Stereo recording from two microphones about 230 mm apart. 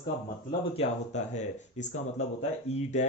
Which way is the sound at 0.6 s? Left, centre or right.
Left.